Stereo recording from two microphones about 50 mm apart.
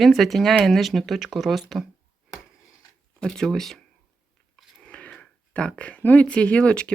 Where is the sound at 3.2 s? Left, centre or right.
Centre.